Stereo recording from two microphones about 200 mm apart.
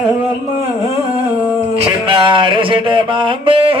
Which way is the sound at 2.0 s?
25° right (ahead or behind).